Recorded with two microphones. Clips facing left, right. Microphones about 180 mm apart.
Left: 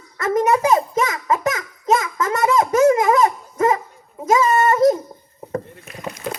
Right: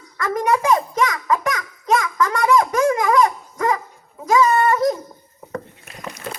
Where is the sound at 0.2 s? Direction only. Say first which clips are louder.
Left 3 dB; 25° left (ahead or behind).